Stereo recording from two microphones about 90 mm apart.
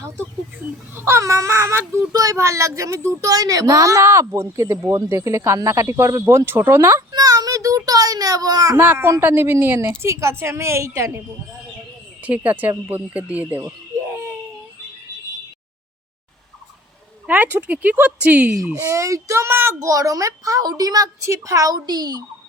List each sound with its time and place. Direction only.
0.9 s speech: 30° right (ahead or behind)
7.1 s a child's voice: 45° right (ahead or behind)
8.7 s speech: 25° right (ahead or behind)
12.2 s speech: 15° right (ahead or behind)
13.6 s crying: 25° right (ahead or behind)
17.2 s speech: 20° right (ahead or behind)
18.8 s speech: 30° right (ahead or behind)
19.8 s speech: 40° right (ahead or behind)